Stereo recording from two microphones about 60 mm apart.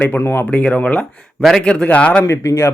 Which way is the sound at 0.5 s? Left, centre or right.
Left.